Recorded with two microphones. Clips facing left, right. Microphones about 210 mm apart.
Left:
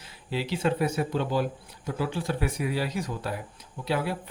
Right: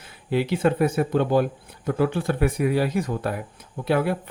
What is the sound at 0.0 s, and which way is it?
Speech, 55° right (ahead or behind).